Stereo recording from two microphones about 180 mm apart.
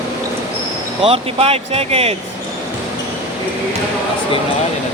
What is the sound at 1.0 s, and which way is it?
Speech, 30° right (ahead or behind).